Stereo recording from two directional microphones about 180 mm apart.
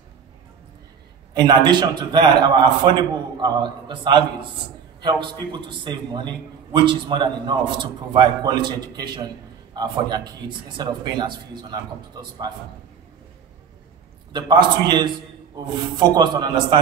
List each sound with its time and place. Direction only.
1.3 s a man's voice: 25° right (ahead or behind)
14.3 s a man's voice: 25° right (ahead or behind)